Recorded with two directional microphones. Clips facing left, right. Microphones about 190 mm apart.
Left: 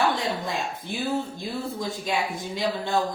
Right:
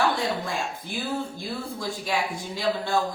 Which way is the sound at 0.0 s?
20° left (ahead or behind).